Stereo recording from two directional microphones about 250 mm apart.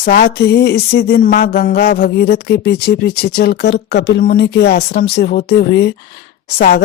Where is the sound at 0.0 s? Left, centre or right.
Left.